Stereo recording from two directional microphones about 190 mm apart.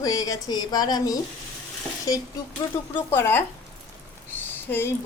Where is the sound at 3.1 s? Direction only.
10° left (ahead or behind).